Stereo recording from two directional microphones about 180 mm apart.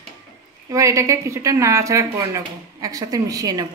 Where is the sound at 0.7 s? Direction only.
15° right (ahead or behind).